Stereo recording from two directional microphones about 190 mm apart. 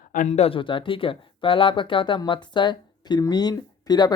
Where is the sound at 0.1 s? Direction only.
40° left (ahead or behind).